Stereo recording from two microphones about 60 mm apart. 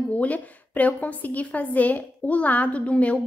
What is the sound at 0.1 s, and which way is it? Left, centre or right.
A woman's voice, left.